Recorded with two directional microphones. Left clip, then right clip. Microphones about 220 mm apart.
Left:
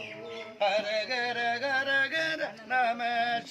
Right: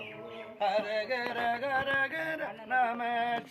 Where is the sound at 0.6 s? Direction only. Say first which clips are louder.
Left 2 dB; 35° left (ahead or behind).